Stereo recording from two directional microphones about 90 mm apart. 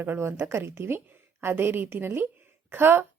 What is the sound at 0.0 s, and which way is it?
A woman's voice, 25° right (ahead or behind).